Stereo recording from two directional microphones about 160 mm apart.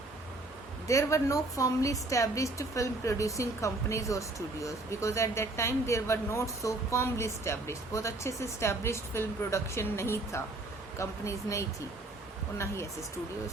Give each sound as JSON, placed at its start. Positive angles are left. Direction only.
{"t": 0.9, "sound": "a woman's voice", "side_deg": 20}